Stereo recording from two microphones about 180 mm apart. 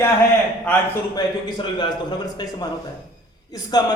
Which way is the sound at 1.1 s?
25° left (ahead or behind).